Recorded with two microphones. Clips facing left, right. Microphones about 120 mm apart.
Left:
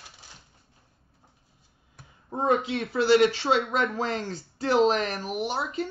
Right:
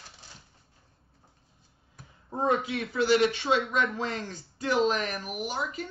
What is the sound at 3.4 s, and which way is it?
Speech, 35° left (ahead or behind).